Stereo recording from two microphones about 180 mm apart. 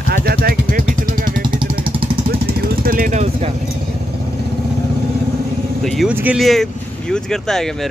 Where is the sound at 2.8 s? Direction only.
50° right (ahead or behind).